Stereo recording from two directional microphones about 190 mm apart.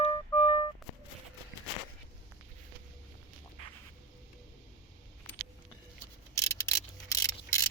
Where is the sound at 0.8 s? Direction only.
Centre (ahead or behind).